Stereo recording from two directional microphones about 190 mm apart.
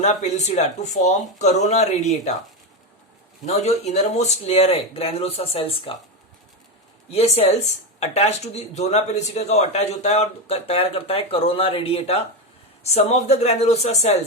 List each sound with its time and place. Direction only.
0.0 s speech: 35° left (ahead or behind)
3.4 s speech: 35° left (ahead or behind)
7.1 s speech: 35° left (ahead or behind)